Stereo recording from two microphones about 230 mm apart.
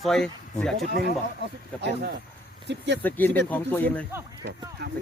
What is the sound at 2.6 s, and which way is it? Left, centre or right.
Speech, right.